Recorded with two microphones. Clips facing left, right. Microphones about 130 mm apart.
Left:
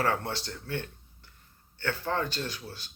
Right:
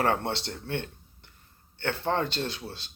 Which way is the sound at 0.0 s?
25° right (ahead or behind).